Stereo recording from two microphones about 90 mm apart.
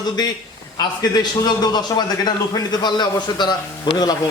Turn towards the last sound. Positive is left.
turn(degrees=55)  # may be behind; listen again after turning